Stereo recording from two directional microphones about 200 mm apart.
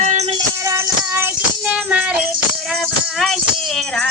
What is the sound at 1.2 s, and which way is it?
Music, 5° right (ahead or behind).